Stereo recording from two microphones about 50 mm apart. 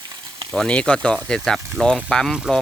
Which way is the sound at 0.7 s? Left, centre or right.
Left.